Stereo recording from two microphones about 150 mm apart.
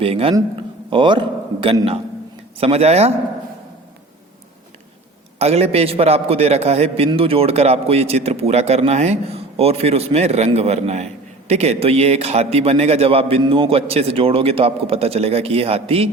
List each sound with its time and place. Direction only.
0.0 s speech: 40° right (ahead or behind)
0.5 s a sound: 35° right (ahead or behind)
2.6 s a man's voice: 40° right (ahead or behind)
5.4 s a man's voice: 45° right (ahead or behind)